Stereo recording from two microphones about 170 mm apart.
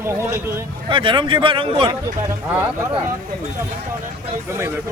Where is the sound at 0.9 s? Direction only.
30° right (ahead or behind).